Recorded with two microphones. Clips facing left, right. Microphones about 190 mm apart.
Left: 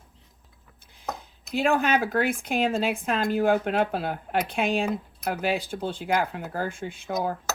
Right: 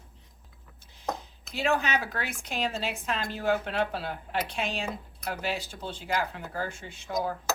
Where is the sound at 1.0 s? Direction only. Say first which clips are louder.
Right 1 dB; 55° left (ahead or behind).